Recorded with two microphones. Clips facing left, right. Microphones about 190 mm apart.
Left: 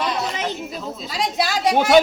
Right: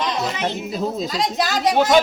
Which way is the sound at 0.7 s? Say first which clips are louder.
Right 7 dB; 40° right (ahead or behind).